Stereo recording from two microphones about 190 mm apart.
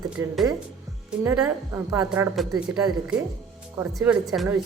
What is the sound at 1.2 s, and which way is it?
A woman's voice, 10° right (ahead or behind).